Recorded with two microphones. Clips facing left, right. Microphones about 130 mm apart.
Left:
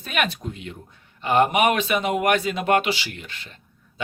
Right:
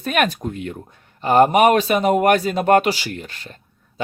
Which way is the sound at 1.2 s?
40° right (ahead or behind).